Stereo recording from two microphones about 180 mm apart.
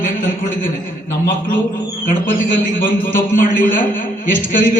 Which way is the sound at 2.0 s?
45° left (ahead or behind).